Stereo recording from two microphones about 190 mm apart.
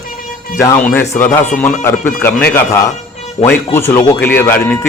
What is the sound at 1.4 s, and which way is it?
Speech, 10° left (ahead or behind).